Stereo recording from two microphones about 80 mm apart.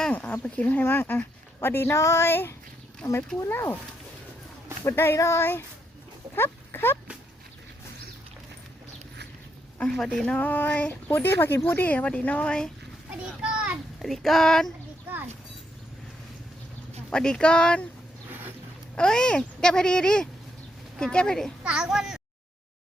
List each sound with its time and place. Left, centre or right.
0.1 s a sound: centre
0.4 s speech: centre
4.9 s speech: left
6.3 s speech: left
10.2 s speech: centre
13.2 s a sound: centre
14.0 s a sound: centre
17.1 s speech: centre
18.3 s boat: right
18.9 s speech: centre
21.6 s a child's voice: centre